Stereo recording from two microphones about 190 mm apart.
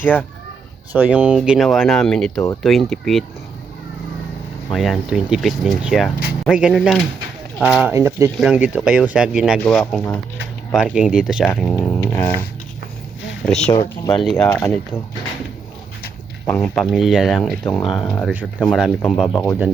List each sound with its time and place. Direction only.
0.0 s speech: 10° left (ahead or behind)
0.9 s speech: 5° right (ahead or behind)
4.7 s speech: centre (ahead or behind)
11.9 s music: 10° left (ahead or behind)
13.4 s speech: 5° left (ahead or behind)
13.7 s speech: 15° left (ahead or behind)
14.2 s speech: 5° left (ahead or behind)
16.5 s speech: centre (ahead or behind)